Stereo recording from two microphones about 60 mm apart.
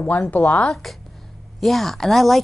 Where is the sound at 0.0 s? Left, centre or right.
Left.